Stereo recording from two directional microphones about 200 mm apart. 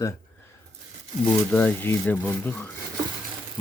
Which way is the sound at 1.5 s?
10° left (ahead or behind).